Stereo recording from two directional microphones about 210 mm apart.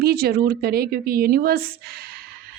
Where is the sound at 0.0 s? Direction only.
45° right (ahead or behind).